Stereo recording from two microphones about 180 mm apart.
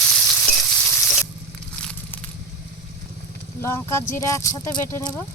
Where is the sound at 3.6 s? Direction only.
15° left (ahead or behind).